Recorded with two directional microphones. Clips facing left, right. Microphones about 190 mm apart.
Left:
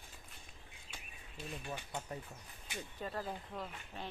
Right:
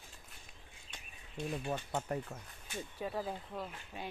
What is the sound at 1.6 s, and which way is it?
Speech, 60° right (ahead or behind).